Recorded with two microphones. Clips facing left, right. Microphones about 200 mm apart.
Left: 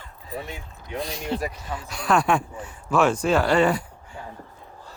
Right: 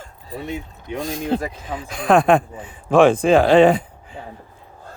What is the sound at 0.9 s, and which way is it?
Speech, 50° right (ahead or behind).